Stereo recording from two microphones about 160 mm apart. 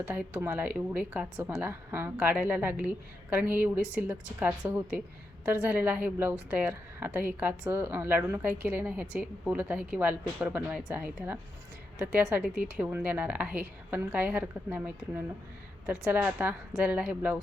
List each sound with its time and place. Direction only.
0.0 s a woman's voice: 10° right (ahead or behind)